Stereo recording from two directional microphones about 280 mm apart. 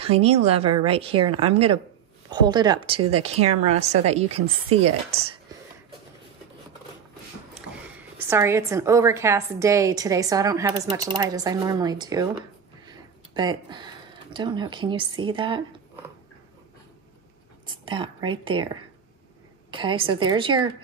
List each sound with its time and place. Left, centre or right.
0.0 s speech: right
8.2 s a woman's voice: centre
12.8 s a sound: centre
15.3 s a woman's voice: centre
17.8 s a woman's voice: centre
19.7 s a woman's voice: centre